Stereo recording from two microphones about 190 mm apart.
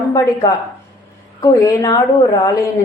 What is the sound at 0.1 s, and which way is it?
A woman's voice, 20° left (ahead or behind).